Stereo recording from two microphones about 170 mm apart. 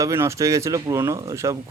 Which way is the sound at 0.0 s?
15° right (ahead or behind).